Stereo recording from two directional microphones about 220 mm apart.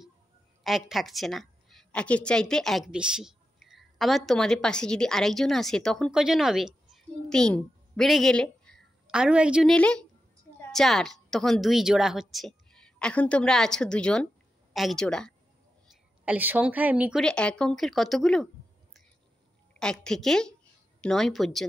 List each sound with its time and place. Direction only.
0.7 s a woman's voice: centre (ahead or behind)
16.3 s speech: 10° right (ahead or behind)
19.8 s speech: 5° left (ahead or behind)